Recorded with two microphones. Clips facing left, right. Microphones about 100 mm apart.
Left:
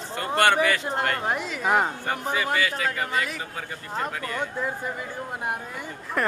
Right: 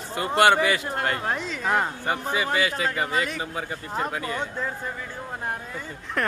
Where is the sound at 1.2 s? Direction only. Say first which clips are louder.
Left 1 dB; 10° left (ahead or behind).